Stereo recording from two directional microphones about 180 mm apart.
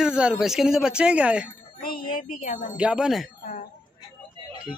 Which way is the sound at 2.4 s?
45° left (ahead or behind).